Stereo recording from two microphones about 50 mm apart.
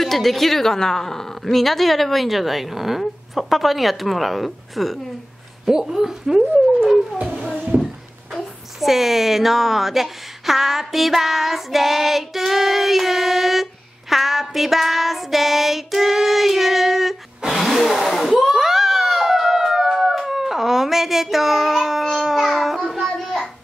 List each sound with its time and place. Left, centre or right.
0.0 s speech: centre
7.7 s a sound: right
8.8 s speech: centre
17.6 s gasp: centre
18.4 s a sound: centre
23.0 s child singing: centre